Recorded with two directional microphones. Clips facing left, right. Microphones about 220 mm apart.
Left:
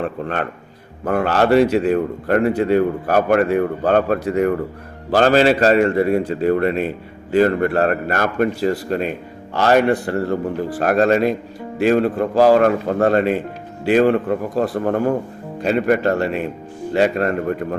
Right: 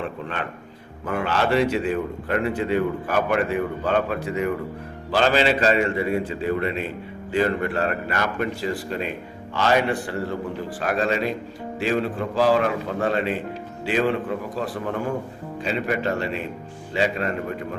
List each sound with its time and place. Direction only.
0.0 s a man's voice: 45° left (ahead or behind)